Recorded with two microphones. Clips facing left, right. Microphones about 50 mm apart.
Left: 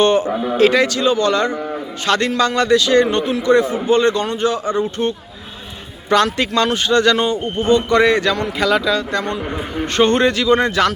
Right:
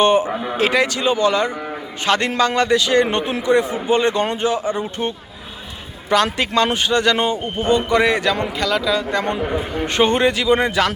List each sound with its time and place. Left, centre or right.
0.0 s speech: centre
6.2 s speech: centre
6.5 s speech: right
6.8 s speech: centre
8.5 s speech: centre
9.8 s speech: centre